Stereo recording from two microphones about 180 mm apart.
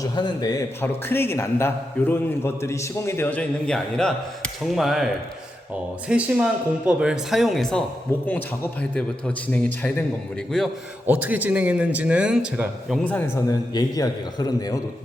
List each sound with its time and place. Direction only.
0.0 s a man's voice: 25° left (ahead or behind); by 5.0 s centre (ahead or behind)
6.1 s a man's voice: 5° right (ahead or behind); by 10.0 s 10° left (ahead or behind)
11.0 s a man's voice: 10° right (ahead or behind)
13.1 s a man's voice: 10° left (ahead or behind)